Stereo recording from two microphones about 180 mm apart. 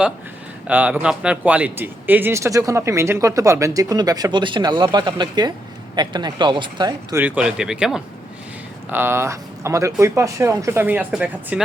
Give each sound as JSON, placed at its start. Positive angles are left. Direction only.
{"t": 0.7, "sound": "speech", "side_deg": -10}
{"t": 7.2, "sound": "speech", "side_deg": -5}